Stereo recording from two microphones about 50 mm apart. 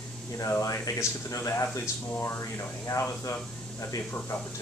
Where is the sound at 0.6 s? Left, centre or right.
Left.